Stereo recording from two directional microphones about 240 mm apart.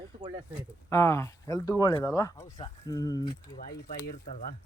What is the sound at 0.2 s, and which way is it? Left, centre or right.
Speech, right.